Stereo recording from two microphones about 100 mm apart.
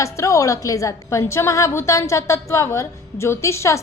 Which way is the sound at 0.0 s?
30° left (ahead or behind).